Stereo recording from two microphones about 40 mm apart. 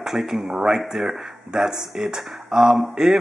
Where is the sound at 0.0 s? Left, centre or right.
Centre.